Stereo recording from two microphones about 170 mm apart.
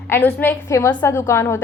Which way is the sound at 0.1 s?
10° left (ahead or behind).